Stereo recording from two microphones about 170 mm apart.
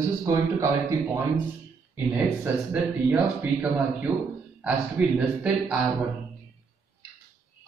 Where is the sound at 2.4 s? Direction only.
15° right (ahead or behind).